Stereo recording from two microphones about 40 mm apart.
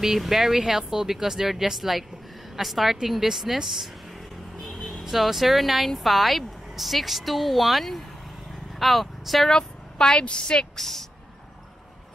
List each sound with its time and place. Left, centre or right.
0.0 s speech: centre
5.0 s speech: centre
9.5 s a woman's voice: centre
10.8 s speech: centre